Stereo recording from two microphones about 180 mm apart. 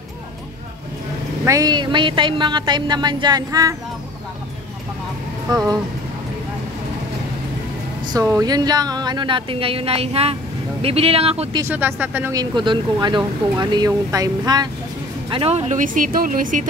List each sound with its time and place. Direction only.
1.4 s speech: 20° right (ahead or behind)
5.5 s speech: 25° right (ahead or behind)
8.1 s speech: 20° right (ahead or behind)
11.6 s speech: 10° right (ahead or behind); by 16.6 s 45° right (ahead or behind)